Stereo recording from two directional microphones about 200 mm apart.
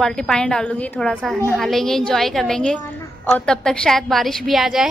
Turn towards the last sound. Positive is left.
turn(degrees=0)  # may be behind; listen again after turning